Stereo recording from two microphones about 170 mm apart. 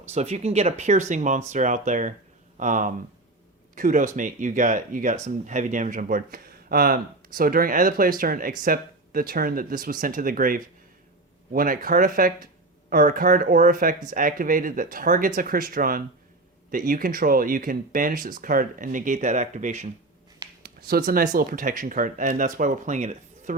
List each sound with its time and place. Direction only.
0.1 s speech: 40° right (ahead or behind)
20.6 s speech: 60° right (ahead or behind); by 23.6 s 45° right (ahead or behind)